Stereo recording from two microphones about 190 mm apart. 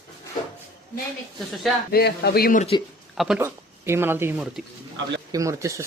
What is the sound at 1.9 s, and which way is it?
Speech, 55° left (ahead or behind).